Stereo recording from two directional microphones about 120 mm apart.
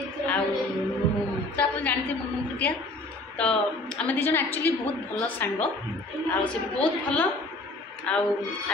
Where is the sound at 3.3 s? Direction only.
10° left (ahead or behind).